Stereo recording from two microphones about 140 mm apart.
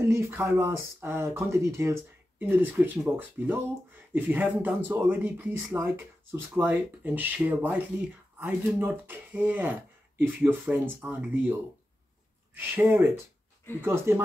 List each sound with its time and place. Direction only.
0.0 s speech: 20° right (ahead or behind)
12.5 s speech: 15° right (ahead or behind)